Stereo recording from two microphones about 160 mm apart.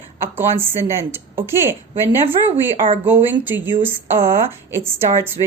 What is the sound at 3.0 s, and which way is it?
Speech, 10° right (ahead or behind).